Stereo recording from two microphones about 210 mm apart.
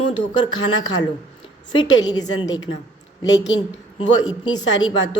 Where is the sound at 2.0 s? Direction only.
20° left (ahead or behind).